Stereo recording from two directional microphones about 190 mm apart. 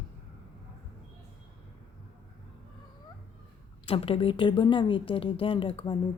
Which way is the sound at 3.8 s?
30° left (ahead or behind).